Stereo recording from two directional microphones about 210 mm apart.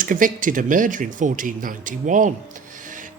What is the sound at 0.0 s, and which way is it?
Speech, 40° right (ahead or behind).